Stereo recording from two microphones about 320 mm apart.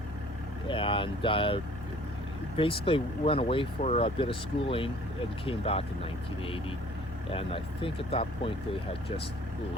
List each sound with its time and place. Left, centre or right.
0.7 s speech: centre
2.6 s speech: centre